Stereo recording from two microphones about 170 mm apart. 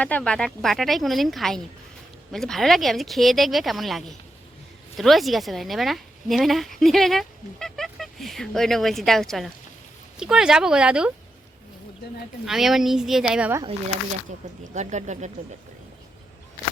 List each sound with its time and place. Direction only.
0.0 s a woman's voice: 5° left (ahead or behind)
12.5 s a woman's voice: centre (ahead or behind)
14.6 s speech: 45° right (ahead or behind)